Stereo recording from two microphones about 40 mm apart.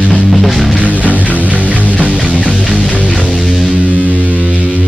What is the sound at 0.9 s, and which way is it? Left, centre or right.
Music, right.